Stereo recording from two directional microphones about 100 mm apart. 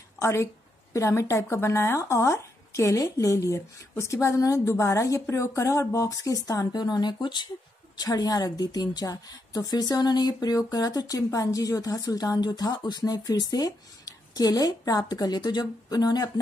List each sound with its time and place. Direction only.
0.2 s a woman's voice: 25° left (ahead or behind)